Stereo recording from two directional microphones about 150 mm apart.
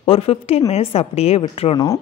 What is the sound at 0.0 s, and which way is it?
A man's voice, 40° left (ahead or behind).